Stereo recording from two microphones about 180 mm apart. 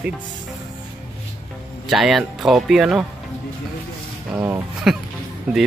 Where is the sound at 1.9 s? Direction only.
Centre (ahead or behind).